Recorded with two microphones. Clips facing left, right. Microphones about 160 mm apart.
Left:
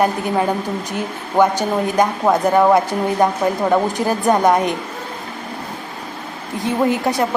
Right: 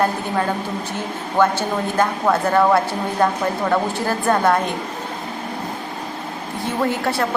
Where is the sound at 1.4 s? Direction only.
15° left (ahead or behind).